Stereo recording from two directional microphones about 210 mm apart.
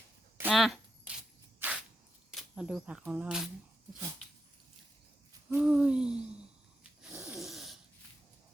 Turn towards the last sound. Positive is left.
turn(degrees=0)  # may be behind; listen again after turning